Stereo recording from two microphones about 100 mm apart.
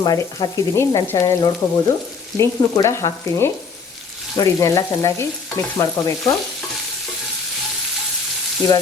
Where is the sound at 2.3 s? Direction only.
30° left (ahead or behind).